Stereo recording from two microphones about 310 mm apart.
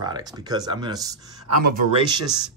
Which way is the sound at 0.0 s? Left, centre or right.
Centre.